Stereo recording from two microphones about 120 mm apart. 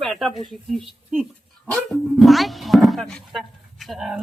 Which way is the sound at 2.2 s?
Centre (ahead or behind).